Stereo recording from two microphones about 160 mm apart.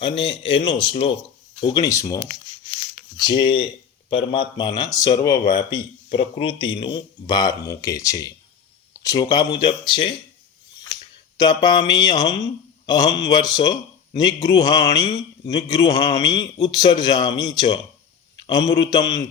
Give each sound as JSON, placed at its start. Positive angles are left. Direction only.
{"t": 0.0, "sound": "a man's voice", "side_deg": 35}
{"t": 3.2, "sound": "a man's voice", "side_deg": 30}
{"t": 11.3, "sound": "a man's voice", "side_deg": 25}